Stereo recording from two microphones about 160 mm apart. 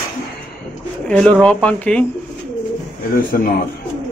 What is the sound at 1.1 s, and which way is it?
Speech, 5° left (ahead or behind).